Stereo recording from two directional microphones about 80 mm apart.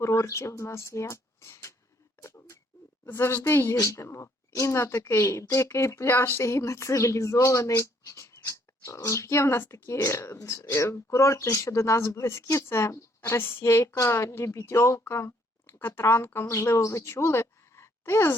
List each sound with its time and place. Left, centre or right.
0.0 s speech: left
2.2 s a sound: left
3.1 s speech: left